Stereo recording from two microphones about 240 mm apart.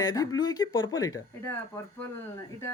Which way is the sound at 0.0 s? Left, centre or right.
Centre.